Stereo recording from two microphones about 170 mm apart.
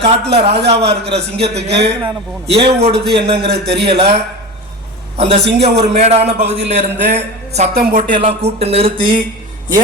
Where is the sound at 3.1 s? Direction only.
75° right (ahead or behind).